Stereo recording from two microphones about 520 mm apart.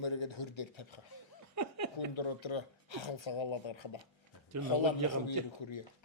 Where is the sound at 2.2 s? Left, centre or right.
Left.